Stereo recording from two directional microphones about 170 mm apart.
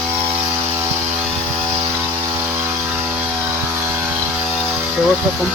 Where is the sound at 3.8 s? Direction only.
15° right (ahead or behind).